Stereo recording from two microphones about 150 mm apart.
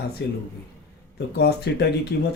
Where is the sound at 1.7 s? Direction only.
90° left.